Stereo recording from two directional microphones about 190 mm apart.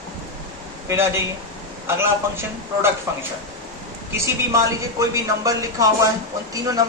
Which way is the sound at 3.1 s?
15° right (ahead or behind).